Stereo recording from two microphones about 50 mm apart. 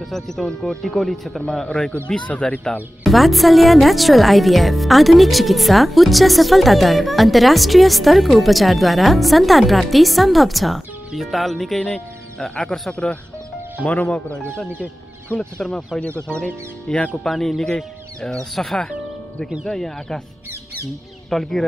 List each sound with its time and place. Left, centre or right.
0.1 s speech: centre
2.2 s speech: left
3.0 s a woman's voice: centre
12.4 s speech: centre
16.3 s speech: left
17.3 s a woman's voice: centre
21.3 s speech: centre